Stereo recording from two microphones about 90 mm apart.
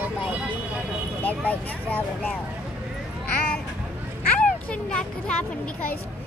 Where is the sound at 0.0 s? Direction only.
15° right (ahead or behind).